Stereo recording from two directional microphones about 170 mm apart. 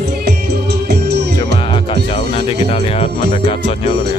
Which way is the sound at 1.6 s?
30° left (ahead or behind).